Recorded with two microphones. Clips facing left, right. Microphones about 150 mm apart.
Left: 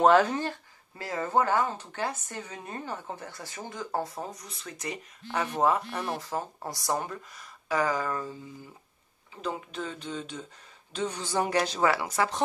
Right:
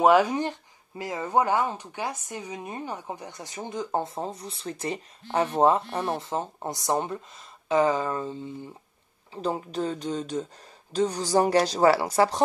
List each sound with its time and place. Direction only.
0.0 s speech: 10° right (ahead or behind); by 12.4 s 35° right (ahead or behind)